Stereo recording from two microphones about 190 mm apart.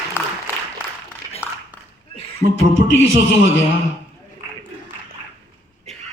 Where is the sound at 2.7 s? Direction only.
75° left (ahead or behind).